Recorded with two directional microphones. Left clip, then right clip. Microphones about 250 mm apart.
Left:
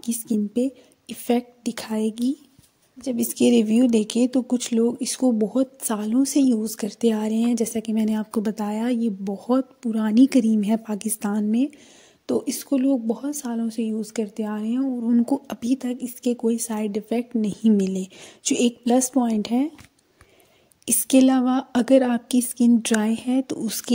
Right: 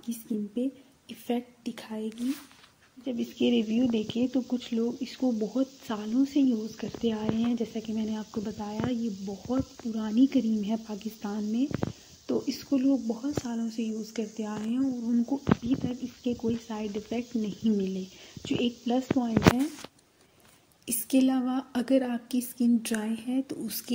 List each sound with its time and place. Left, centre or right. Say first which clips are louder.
0.0 s a woman's voice: left 9 dB; left
20.8 s a woman's voice: left 8 dB; left